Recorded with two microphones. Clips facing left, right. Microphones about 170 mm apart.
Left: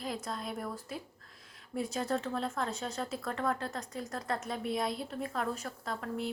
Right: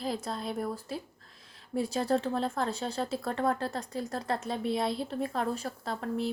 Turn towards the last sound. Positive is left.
turn(degrees=-30)  # may be behind; listen again after turning